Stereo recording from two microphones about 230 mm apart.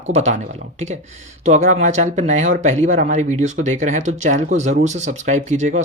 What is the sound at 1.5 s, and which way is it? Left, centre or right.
Speech, right.